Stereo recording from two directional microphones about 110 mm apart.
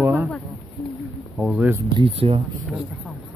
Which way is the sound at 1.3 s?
10° right (ahead or behind).